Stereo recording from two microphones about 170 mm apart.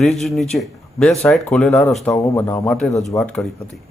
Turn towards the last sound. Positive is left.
turn(degrees=10)  # may be behind; listen again after turning